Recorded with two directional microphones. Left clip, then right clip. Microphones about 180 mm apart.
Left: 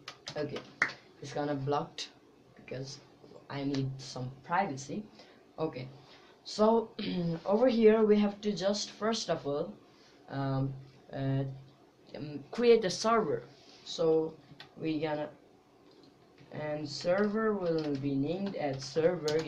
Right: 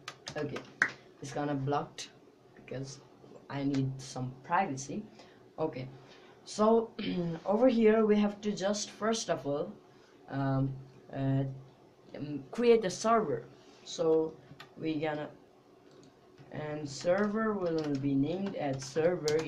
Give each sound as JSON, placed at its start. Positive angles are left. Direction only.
{"t": 0.7, "sound": "speech", "side_deg": 0}
{"t": 14.8, "sound": "speech", "side_deg": 0}
{"t": 16.5, "sound": "speech", "side_deg": -5}
{"t": 17.7, "sound": "speech", "side_deg": -15}
{"t": 18.0, "sound": "speech", "side_deg": 0}